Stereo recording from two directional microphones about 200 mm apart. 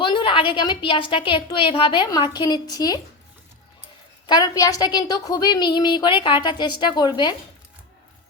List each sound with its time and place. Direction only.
0.0 s a woman's voice: 25° left (ahead or behind)
4.3 s a woman's voice: 20° left (ahead or behind)